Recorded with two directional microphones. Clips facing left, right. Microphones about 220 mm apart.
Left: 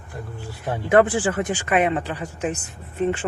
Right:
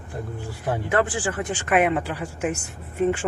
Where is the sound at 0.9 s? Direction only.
20° left (ahead or behind).